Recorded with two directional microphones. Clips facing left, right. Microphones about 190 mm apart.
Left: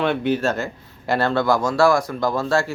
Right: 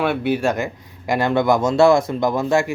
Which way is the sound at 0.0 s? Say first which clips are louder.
Right 1 dB; 5° right (ahead or behind).